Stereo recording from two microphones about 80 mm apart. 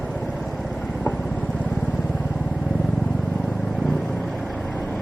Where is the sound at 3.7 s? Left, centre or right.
Centre.